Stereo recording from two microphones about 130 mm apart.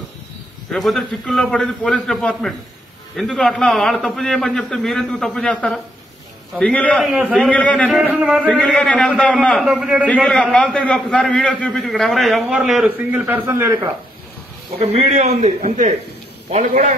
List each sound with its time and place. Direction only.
0.7 s a man's voice: centre (ahead or behind)
7.1 s speech: 5° right (ahead or behind)
7.3 s a man's voice: 10° left (ahead or behind)
8.1 s speech: 10° right (ahead or behind)
8.5 s a man's voice: 5° left (ahead or behind)
9.7 s speech: 5° right (ahead or behind)
10.2 s a man's voice: 5° left (ahead or behind)
13.2 s speech: 15° right (ahead or behind)
13.6 s speech: 25° right (ahead or behind)
14.8 s a man's voice: 50° right (ahead or behind)